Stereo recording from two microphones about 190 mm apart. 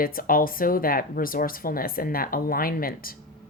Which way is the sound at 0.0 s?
50° left (ahead or behind).